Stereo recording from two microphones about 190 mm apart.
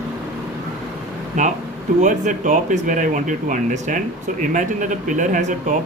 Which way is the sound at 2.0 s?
40° right (ahead or behind).